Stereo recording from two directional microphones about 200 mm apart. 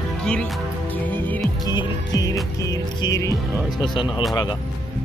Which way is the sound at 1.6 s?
20° left (ahead or behind).